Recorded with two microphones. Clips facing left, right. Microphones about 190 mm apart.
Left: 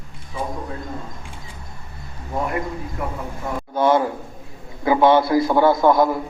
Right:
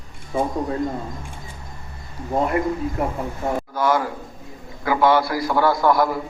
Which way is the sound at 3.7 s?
25° left (ahead or behind).